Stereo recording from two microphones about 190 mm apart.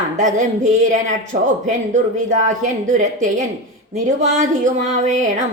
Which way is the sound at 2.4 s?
40° right (ahead or behind).